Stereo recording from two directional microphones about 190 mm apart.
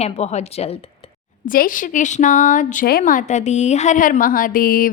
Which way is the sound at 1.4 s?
45° left (ahead or behind).